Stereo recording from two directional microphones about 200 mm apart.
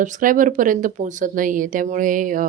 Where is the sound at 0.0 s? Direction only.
40° right (ahead or behind).